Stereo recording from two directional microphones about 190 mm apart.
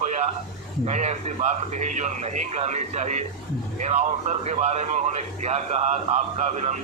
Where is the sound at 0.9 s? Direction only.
35° right (ahead or behind).